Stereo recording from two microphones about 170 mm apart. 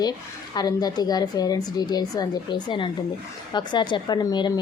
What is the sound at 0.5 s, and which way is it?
Speech, 25° left (ahead or behind).